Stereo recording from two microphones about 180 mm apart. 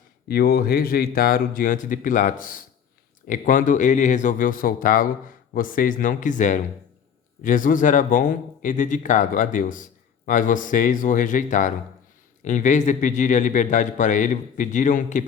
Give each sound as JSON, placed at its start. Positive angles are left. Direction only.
{"t": 0.3, "sound": "speech", "side_deg": 55}